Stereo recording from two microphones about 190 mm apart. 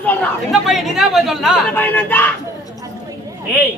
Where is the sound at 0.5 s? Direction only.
Centre (ahead or behind).